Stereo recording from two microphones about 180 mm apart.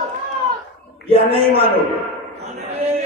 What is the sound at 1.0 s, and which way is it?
Speech, 30° right (ahead or behind).